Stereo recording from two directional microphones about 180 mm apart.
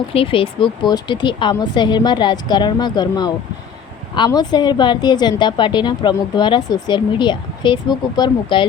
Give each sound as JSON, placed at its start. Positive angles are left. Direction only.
{"t": 0.1, "sound": "a woman's voice", "side_deg": 30}